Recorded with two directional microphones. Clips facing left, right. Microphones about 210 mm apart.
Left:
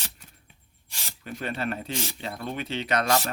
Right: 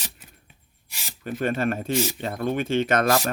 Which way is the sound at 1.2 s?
50° right (ahead or behind).